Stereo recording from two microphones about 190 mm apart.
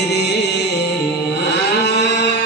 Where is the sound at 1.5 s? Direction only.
65° left (ahead or behind).